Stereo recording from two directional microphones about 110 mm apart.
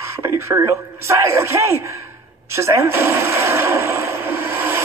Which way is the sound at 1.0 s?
25° right (ahead or behind).